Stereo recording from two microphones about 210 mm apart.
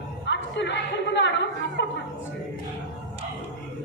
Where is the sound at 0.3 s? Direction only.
55° left (ahead or behind).